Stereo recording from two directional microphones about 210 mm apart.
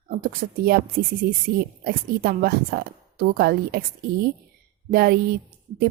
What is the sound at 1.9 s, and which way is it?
A woman's voice, 45° right (ahead or behind).